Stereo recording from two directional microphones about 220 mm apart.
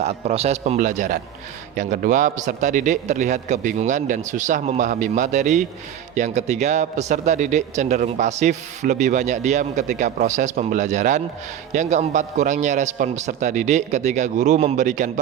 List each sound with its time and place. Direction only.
0.0 s a man's voice: 30° right (ahead or behind)